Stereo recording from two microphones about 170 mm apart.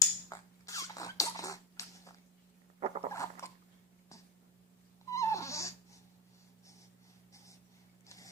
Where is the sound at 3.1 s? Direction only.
15° left (ahead or behind).